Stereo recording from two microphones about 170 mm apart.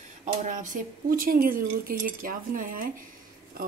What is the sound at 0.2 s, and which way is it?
A woman's voice, 50° right (ahead or behind).